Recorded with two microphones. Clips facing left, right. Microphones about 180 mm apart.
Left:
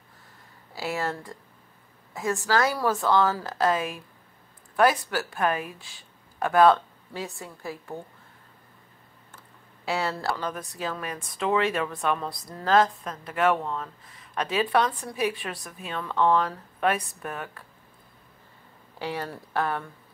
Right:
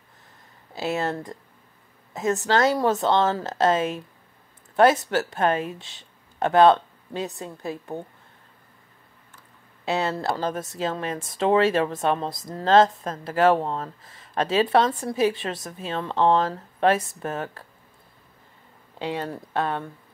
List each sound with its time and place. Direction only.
0.7 s speech: 20° right (ahead or behind)
5.1 s speech: 25° right (ahead or behind)
9.8 s speech: 20° right (ahead or behind)
18.9 s speech: 20° right (ahead or behind)